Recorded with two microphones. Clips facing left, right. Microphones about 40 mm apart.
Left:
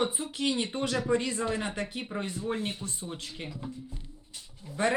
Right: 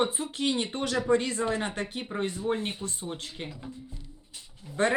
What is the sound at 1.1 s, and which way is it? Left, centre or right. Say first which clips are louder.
Speech: right 5 dB; right.